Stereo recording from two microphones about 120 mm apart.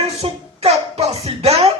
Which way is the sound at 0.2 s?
60° right (ahead or behind).